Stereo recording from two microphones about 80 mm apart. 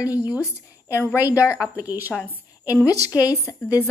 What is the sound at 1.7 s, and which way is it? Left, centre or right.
Speech, right.